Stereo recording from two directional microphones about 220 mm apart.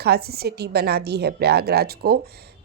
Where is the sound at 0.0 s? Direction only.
45° right (ahead or behind).